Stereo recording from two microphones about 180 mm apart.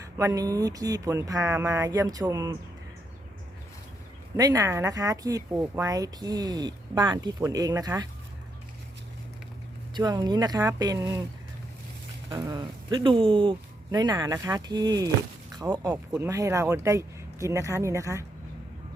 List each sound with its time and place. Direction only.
0.2 s speech: 15° right (ahead or behind)
4.4 s speech: 20° right (ahead or behind)
9.9 s speech: 25° right (ahead or behind)
12.3 s speech: 25° right (ahead or behind)
15.9 s speech: 10° right (ahead or behind)